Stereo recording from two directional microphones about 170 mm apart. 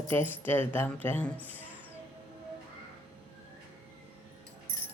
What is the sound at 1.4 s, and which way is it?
Music, 10° right (ahead or behind).